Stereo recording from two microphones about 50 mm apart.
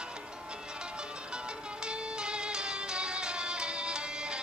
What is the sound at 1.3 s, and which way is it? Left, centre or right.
Music, centre.